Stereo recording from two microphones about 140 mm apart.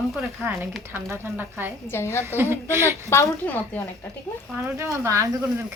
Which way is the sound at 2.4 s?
15° right (ahead or behind).